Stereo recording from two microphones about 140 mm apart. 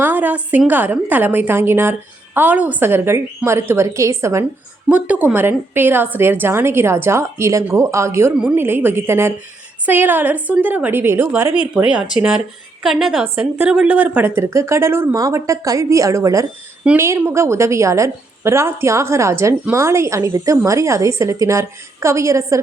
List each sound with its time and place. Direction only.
0.0 s a woman's voice: 10° right (ahead or behind)
4.9 s a woman's voice: 10° right (ahead or behind)